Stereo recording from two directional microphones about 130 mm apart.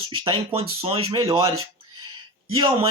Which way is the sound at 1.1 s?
35° right (ahead or behind).